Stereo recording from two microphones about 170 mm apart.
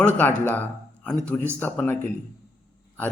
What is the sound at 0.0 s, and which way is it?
A man's voice, 10° left (ahead or behind).